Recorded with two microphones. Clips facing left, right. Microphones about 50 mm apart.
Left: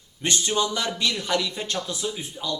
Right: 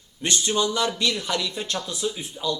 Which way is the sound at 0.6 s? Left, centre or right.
Left.